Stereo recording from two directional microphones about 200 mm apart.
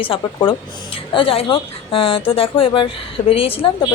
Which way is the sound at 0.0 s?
25° left (ahead or behind).